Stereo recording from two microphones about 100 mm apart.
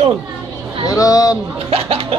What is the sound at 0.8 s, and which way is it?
Speech, 35° left (ahead or behind).